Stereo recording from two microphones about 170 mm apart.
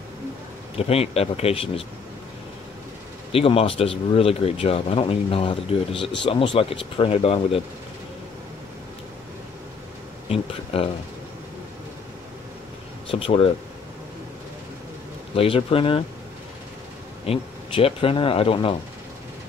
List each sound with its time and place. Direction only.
0.7 s speech: 35° left (ahead or behind)
3.3 s speech: 35° left (ahead or behind)
10.2 s speech: 35° left (ahead or behind)
13.1 s speech: 30° left (ahead or behind)
15.3 s speech: 35° left (ahead or behind)
17.3 s speech: 35° left (ahead or behind)